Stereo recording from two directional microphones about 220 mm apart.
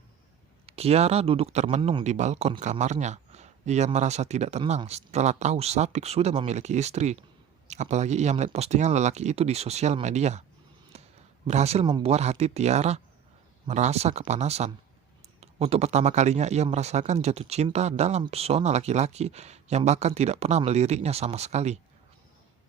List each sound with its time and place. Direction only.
0.7 s speech: 30° right (ahead or behind)
10.9 s a sound: 30° right (ahead or behind)
11.4 s speech: 30° right (ahead or behind)